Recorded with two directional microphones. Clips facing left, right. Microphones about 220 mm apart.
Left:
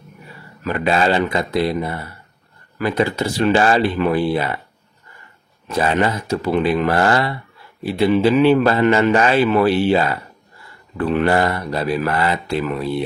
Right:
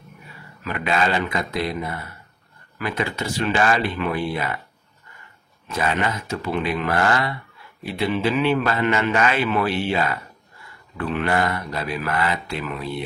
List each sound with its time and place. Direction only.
0.7 s a man's voice: 35° left (ahead or behind)
5.7 s a man's voice: 35° left (ahead or behind)